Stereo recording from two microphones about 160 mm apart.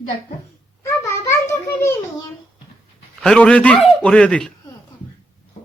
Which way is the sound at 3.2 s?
5° left (ahead or behind).